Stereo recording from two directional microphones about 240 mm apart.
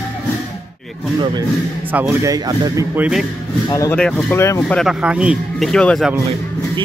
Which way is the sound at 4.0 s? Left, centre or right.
Centre.